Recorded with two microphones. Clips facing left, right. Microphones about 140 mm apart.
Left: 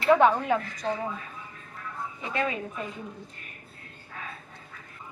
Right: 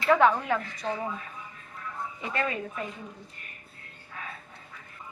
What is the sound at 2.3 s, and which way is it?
Speech, 15° left (ahead or behind).